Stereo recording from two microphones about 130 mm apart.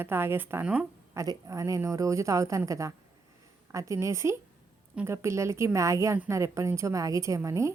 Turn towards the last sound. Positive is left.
turn(degrees=-25)  # may be behind; listen again after turning